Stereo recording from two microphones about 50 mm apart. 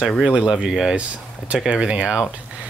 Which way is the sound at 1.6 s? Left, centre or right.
Right.